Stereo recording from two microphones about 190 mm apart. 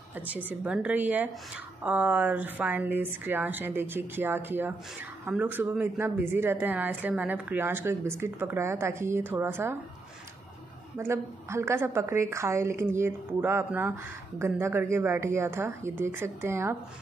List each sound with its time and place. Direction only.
0.3 s speech: 10° right (ahead or behind)
11.0 s speech: 15° right (ahead or behind)